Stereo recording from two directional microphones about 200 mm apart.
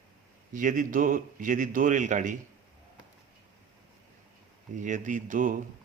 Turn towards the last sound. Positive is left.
turn(degrees=-40)  # may be behind; listen again after turning